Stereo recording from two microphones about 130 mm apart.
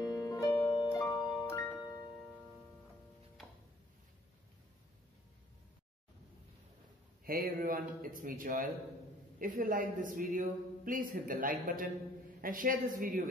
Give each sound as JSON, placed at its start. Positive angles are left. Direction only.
{"t": 0.0, "sound": "music", "side_deg": 30}
{"t": 0.5, "sound": "harp", "side_deg": 20}
{"t": 0.9, "sound": "music", "side_deg": 25}
{"t": 7.2, "sound": "a man's voice", "side_deg": -90}